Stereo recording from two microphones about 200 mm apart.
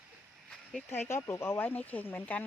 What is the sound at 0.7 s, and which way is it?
Speech, 5° left (ahead or behind).